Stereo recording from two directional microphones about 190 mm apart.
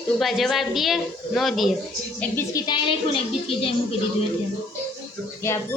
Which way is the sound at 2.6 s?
25° left (ahead or behind).